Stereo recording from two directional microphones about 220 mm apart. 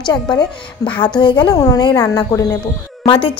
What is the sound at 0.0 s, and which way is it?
A woman's voice, 20° left (ahead or behind).